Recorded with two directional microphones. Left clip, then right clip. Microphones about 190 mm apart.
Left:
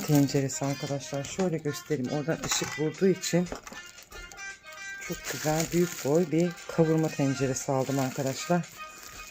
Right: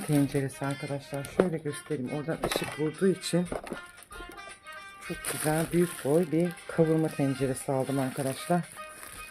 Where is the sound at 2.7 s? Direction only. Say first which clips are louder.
Left 4 dB; 10° left (ahead or behind).